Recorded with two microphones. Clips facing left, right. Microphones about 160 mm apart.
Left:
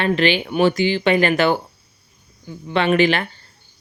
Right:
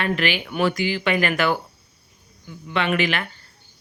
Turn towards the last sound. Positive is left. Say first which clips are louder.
# left 6 dB
turn(degrees=30)  # may be behind; listen again after turning